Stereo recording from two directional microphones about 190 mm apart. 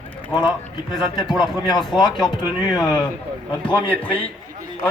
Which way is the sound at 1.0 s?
25° left (ahead or behind).